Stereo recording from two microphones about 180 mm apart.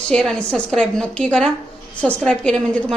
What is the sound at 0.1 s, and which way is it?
A woman's voice, 5° left (ahead or behind).